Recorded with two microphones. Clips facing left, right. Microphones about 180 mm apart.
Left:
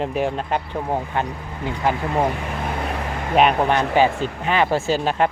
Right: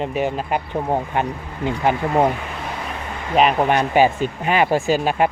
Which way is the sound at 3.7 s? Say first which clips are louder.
Right 1 dB; 15° right (ahead or behind).